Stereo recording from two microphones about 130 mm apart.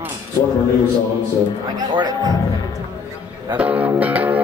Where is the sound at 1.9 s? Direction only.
35° right (ahead or behind).